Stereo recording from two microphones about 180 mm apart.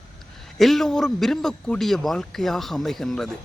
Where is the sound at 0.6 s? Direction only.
Centre (ahead or behind).